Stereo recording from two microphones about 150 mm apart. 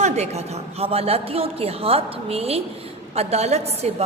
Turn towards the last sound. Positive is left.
turn(degrees=-45)  # may be behind; listen again after turning